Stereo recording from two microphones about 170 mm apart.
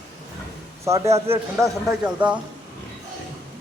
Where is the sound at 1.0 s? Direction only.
15° right (ahead or behind).